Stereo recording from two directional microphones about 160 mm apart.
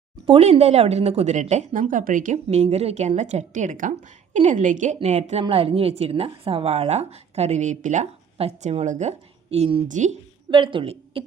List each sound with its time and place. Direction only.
0.3 s a woman's voice: 35° right (ahead or behind)
9.9 s speech: 50° right (ahead or behind)
10.5 s a woman's voice: 30° right (ahead or behind)